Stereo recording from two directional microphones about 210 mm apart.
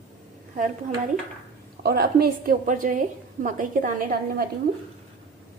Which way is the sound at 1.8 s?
45° right (ahead or behind).